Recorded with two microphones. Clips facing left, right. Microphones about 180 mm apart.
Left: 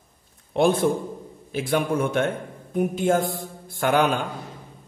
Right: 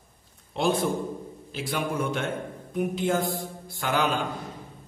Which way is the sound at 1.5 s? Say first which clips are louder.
Left 6 dB; 55° left (ahead or behind).